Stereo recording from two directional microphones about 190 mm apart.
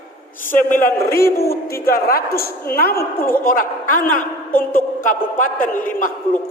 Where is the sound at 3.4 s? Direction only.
45° left (ahead or behind).